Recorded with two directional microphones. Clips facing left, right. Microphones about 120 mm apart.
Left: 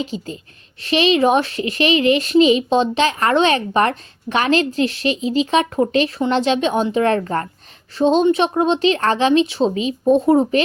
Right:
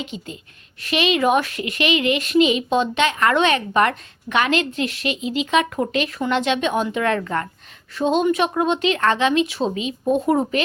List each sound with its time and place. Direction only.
0.0 s a woman's voice: 35° left (ahead or behind)